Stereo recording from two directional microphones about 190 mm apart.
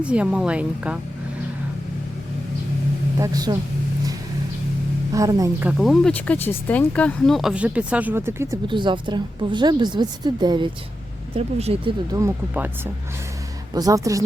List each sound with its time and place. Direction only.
0.0 s speech: 5° right (ahead or behind)
3.2 s speech: 20° right (ahead or behind)
5.1 s speech: 15° right (ahead or behind)
5.7 s speech: centre (ahead or behind)
8.6 s speech: 25° right (ahead or behind)
12.1 s speech: 15° right (ahead or behind)